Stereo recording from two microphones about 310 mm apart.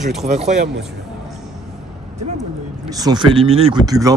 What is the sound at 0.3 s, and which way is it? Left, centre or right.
Speech, right.